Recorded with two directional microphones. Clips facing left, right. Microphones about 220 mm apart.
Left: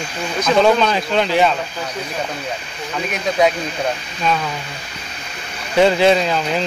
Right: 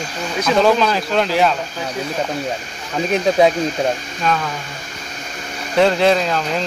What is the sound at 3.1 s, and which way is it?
Speech, 30° right (ahead or behind).